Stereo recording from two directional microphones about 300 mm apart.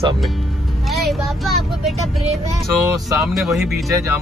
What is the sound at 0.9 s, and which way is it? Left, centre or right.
Speech, centre.